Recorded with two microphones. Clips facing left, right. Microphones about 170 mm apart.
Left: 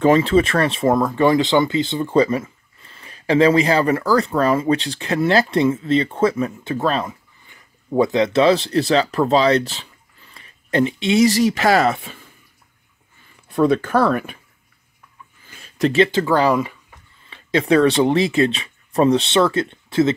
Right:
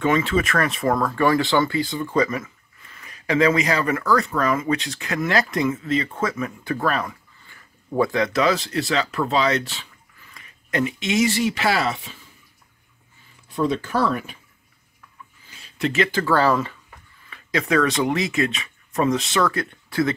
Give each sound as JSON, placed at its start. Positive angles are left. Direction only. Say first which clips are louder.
{"t": 0.0, "sound": "speech", "louder": "left 6 dB", "side_deg": 35}
{"t": 13.5, "sound": "speech", "louder": "left 6 dB", "side_deg": 55}
{"t": 15.5, "sound": "a sound", "louder": "left 6 dB", "side_deg": 50}
{"t": 15.9, "sound": "speech", "louder": "left 4 dB", "side_deg": 25}
{"t": 17.3, "sound": "speech", "louder": "left 5 dB", "side_deg": 30}